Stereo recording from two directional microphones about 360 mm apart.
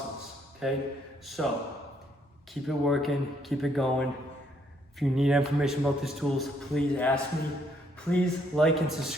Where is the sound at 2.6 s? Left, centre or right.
Centre.